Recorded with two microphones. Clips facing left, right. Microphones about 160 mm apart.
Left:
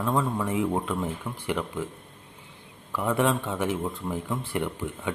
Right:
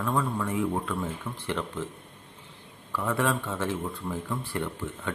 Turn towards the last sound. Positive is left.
turn(degrees=15)  # may be behind; listen again after turning